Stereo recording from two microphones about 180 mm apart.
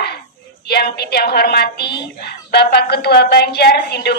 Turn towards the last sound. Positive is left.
turn(degrees=65)  # may be behind; listen again after turning